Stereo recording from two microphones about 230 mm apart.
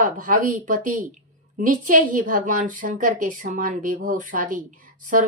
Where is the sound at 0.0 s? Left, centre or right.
Right.